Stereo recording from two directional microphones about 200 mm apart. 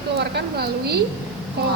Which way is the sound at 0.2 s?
55° right (ahead or behind).